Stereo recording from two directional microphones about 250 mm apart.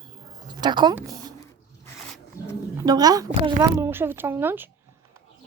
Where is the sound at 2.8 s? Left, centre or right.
Centre.